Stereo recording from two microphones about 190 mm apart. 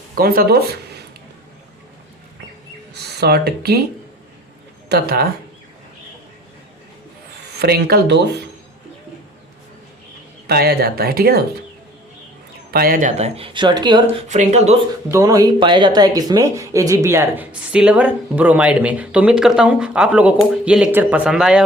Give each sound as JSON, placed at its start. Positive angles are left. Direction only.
{"t": 0.2, "sound": "speech", "side_deg": -50}
{"t": 2.9, "sound": "speech", "side_deg": -60}
{"t": 4.9, "sound": "speech", "side_deg": -60}
{"t": 7.6, "sound": "speech", "side_deg": -55}
{"t": 10.4, "sound": "speech", "side_deg": -55}
{"t": 12.7, "sound": "speech", "side_deg": -50}
{"t": 14.3, "sound": "speech", "side_deg": -35}
{"t": 15.1, "sound": "speech", "side_deg": -20}